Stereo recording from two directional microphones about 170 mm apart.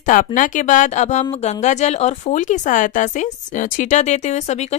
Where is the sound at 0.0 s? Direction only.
50° left (ahead or behind).